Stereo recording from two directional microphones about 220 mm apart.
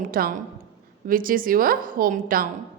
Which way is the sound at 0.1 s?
40° right (ahead or behind).